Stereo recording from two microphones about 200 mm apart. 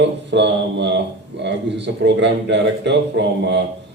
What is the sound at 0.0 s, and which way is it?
A man's voice, 60° right (ahead or behind).